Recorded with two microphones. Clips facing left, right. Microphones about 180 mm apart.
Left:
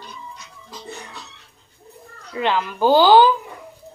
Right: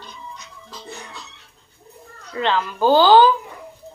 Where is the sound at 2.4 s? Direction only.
15° left (ahead or behind).